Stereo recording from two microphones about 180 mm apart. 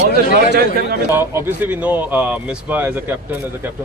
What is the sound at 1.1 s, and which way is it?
Speech, 15° right (ahead or behind).